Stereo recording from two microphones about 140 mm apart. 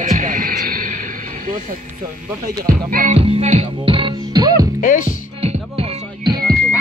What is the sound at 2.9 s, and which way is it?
Music, 80° right.